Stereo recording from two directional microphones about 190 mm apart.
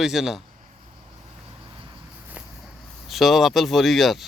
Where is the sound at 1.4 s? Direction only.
25° right (ahead or behind).